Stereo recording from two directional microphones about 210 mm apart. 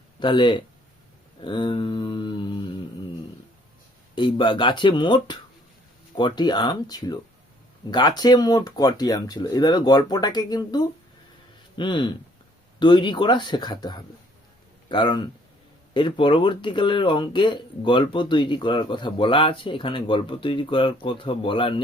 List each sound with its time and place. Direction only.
0.2 s speech: 20° left (ahead or behind)
1.5 s mantra: 20° left (ahead or behind)
4.1 s speech: 25° left (ahead or behind)